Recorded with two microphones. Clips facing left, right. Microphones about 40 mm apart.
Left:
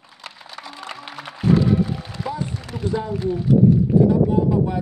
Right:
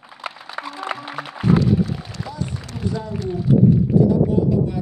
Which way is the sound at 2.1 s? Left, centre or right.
Left.